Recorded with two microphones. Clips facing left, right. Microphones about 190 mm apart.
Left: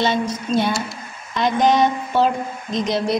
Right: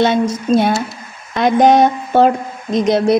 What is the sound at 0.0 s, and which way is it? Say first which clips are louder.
A woman's voice: right 6 dB; 55° right (ahead or behind).